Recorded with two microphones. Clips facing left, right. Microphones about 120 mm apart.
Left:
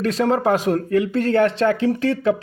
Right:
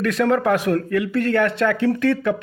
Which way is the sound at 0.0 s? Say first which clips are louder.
Even; 35° left (ahead or behind).